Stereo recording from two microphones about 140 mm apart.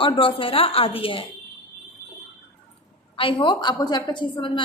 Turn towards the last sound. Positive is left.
turn(degrees=35)  # may be behind; listen again after turning